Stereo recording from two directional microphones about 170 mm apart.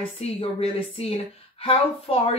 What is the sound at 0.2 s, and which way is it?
A woman's voice, 35° left (ahead or behind).